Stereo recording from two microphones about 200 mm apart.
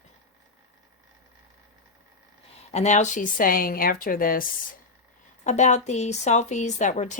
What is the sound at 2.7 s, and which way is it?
Speech, 35° left (ahead or behind).